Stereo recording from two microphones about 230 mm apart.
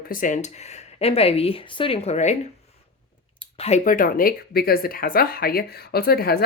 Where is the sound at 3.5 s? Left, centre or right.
Left.